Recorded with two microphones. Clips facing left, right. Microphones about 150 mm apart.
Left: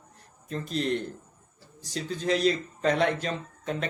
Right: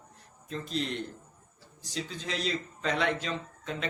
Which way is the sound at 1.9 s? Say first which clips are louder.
Left 8 dB; 45° left (ahead or behind).